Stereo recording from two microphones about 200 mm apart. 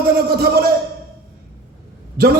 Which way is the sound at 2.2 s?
50° right (ahead or behind).